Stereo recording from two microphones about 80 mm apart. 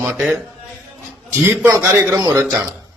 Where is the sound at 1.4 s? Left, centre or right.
Right.